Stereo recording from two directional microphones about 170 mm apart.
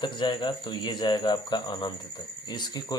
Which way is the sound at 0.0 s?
30° left (ahead or behind).